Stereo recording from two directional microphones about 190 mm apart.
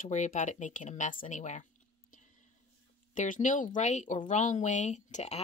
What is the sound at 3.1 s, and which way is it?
Speech, 40° left (ahead or behind).